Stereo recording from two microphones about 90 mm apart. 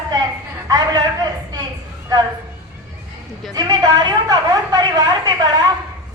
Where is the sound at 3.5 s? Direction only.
50° right (ahead or behind).